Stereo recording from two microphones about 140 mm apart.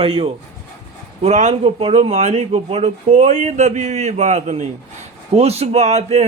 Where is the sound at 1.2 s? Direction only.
55° right (ahead or behind).